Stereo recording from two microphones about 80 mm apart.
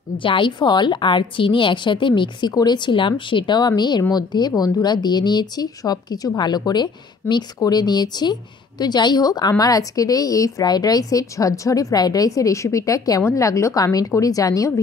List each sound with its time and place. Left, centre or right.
0.2 s a woman's voice: left
2.5 s speech: left